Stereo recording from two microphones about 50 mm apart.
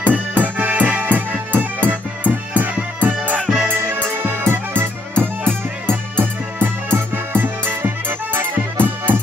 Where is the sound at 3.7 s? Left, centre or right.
Right.